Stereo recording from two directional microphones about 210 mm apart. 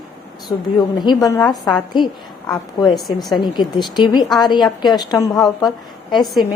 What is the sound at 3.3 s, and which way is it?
A woman's voice, 20° left (ahead or behind).